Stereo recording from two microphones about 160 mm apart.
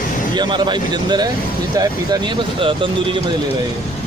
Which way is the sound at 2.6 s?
35° right (ahead or behind).